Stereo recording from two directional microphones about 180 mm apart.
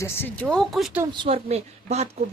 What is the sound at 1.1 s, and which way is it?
Speech, 30° right (ahead or behind).